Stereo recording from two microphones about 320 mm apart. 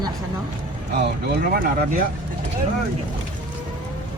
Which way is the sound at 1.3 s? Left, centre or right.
Right.